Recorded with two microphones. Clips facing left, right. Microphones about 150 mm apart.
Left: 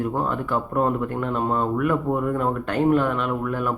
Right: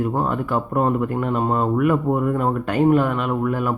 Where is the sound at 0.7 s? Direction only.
5° right (ahead or behind).